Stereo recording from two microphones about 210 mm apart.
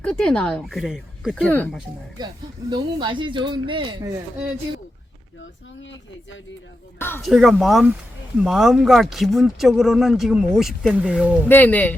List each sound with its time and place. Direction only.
0.0 s speech: 5° left (ahead or behind)
2.1 s speech: 20° right (ahead or behind)
5.8 s speech: 65° left (ahead or behind)
7.2 s speech: centre (ahead or behind)
11.4 s speech: 10° left (ahead or behind)